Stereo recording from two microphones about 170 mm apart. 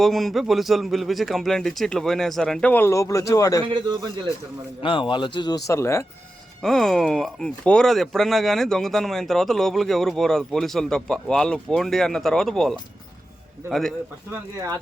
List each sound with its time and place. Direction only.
0.0 s speech: centre (ahead or behind); by 3.6 s 20° left (ahead or behind)
3.6 s a man's voice: 25° right (ahead or behind)
4.8 s speech: 30° left (ahead or behind)
6.6 s speech: 5° left (ahead or behind)